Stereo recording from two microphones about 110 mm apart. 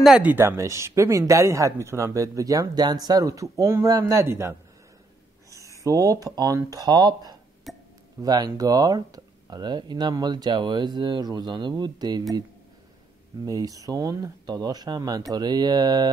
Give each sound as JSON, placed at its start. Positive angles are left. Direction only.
{"t": 0.2, "sound": "speech", "side_deg": -20}
{"t": 7.7, "sound": "a sound", "side_deg": 0}
{"t": 8.2, "sound": "speech", "side_deg": -35}
{"t": 13.5, "sound": "speech", "side_deg": -35}